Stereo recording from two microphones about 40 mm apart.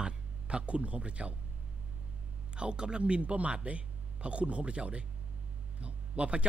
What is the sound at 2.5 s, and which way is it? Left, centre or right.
A man's voice, right.